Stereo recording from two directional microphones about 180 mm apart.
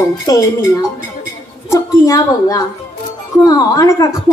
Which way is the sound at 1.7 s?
20° left (ahead or behind).